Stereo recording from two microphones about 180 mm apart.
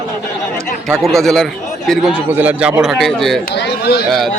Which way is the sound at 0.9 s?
Centre (ahead or behind).